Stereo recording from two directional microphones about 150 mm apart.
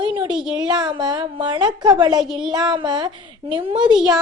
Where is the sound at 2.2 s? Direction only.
5° right (ahead or behind).